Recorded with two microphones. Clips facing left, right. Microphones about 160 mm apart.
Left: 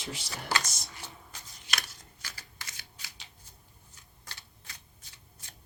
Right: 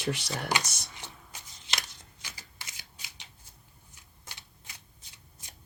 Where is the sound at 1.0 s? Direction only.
20° right (ahead or behind).